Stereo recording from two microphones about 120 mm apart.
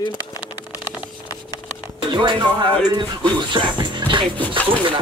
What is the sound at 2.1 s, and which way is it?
Speech, 35° right (ahead or behind).